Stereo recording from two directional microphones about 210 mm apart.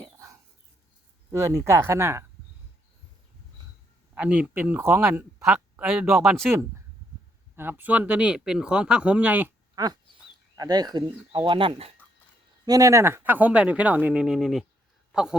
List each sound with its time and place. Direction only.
0.0 s chicken: 15° right (ahead or behind)
1.3 s speech: 15° right (ahead or behind)
4.1 s speech: 5° right (ahead or behind)
7.5 s speech: 10° right (ahead or behind); by 11.9 s 25° right (ahead or behind)
12.6 s a man's voice: 15° right (ahead or behind)